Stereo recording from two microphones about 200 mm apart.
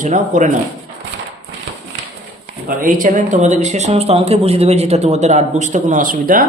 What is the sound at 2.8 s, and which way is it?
A man's voice, 40° right (ahead or behind).